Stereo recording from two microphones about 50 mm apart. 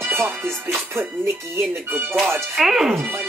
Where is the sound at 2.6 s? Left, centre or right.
Centre.